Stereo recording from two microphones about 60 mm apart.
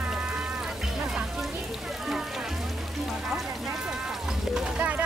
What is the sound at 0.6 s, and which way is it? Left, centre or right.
Music, centre.